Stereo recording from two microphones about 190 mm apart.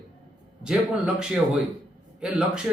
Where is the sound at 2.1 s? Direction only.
5° right (ahead or behind).